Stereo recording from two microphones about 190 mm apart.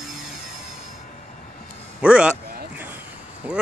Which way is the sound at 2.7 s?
10° right (ahead or behind).